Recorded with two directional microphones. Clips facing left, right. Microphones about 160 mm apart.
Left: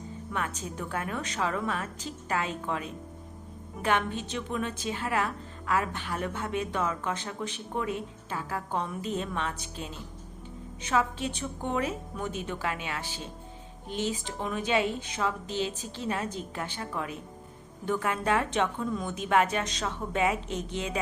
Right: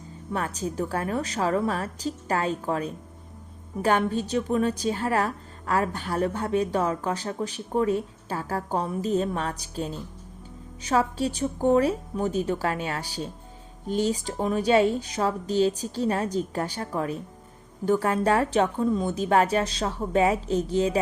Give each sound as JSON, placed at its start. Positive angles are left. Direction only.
{"t": 0.3, "sound": "a woman's voice", "side_deg": -35}